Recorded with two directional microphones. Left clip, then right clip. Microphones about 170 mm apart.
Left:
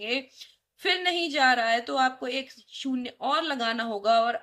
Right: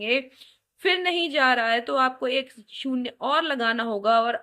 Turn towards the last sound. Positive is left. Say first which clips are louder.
# right 2 dB
turn(degrees=-25)  # may be behind; listen again after turning